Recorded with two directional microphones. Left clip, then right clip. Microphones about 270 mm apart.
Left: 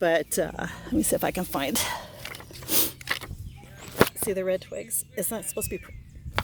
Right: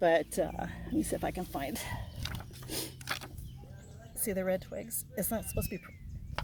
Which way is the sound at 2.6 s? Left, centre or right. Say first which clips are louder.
Left 11 dB; left.